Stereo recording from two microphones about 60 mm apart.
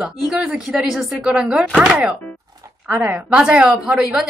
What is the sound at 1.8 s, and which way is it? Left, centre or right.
A woman's voice, right.